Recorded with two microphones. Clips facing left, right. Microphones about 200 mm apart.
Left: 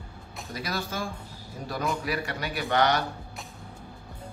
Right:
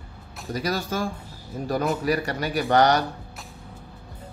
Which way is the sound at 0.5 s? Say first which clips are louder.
Right 6 dB; 40° right (ahead or behind).